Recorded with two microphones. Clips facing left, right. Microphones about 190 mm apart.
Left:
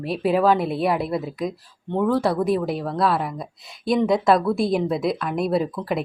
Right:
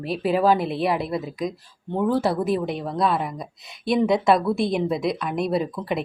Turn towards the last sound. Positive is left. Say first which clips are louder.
# left 2 dB
turn(degrees=0)  # may be behind; listen again after turning